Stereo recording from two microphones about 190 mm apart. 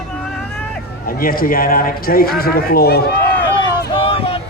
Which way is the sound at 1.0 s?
50° left (ahead or behind).